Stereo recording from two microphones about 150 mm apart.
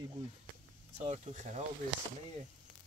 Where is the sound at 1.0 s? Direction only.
50° right (ahead or behind).